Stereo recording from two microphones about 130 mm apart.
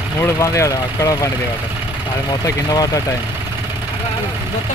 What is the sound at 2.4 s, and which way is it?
Speech, 30° left (ahead or behind).